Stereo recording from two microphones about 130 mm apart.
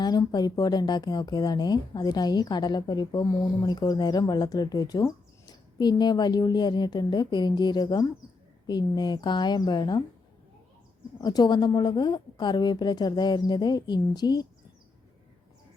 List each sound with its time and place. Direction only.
0.0 s speech: 30° left (ahead or behind)
11.2 s speech: 30° left (ahead or behind)